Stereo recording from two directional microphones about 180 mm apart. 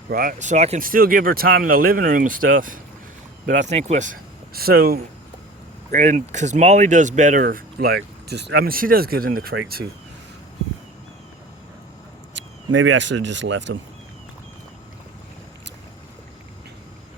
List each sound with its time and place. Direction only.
0.1 s speech: 50° right (ahead or behind)
0.9 s speech: 50° right (ahead or behind)
5.9 s speech: 40° right (ahead or behind)
12.4 s speech: 90° right